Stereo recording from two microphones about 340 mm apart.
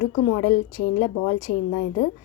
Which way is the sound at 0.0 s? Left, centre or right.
Left.